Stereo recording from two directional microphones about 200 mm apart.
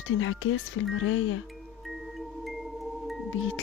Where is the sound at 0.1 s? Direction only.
85° left.